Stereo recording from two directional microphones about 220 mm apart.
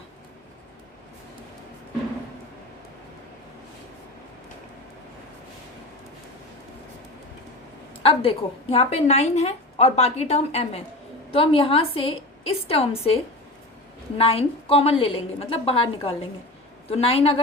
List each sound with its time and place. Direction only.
8.0 s a woman's voice: 25° left (ahead or behind)
14.2 s a woman's voice: 25° left (ahead or behind)